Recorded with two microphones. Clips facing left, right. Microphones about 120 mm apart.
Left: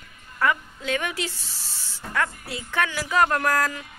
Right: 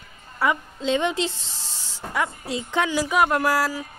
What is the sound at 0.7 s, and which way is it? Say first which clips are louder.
A woman's voice: right 5 dB; 25° right (ahead or behind).